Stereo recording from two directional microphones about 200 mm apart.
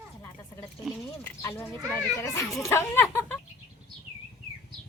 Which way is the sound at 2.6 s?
15° left (ahead or behind).